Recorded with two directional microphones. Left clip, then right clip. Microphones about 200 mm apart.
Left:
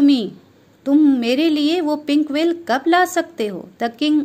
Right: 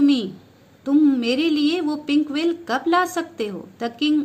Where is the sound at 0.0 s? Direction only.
35° left (ahead or behind).